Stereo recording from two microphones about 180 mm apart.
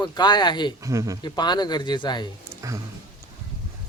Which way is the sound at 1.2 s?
25° left (ahead or behind).